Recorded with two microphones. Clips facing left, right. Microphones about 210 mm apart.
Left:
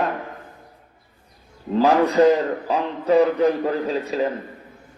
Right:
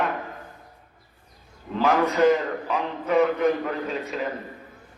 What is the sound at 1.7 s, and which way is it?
A man's voice, 35° left (ahead or behind).